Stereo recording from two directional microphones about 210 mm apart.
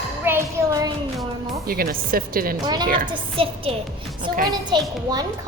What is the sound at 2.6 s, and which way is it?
A woman's voice, 20° right (ahead or behind).